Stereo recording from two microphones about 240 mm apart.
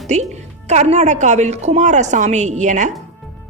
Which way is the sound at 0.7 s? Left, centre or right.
Right.